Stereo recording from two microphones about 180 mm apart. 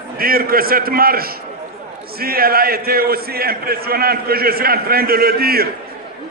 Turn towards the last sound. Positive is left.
turn(degrees=-55)  # may be behind; listen again after turning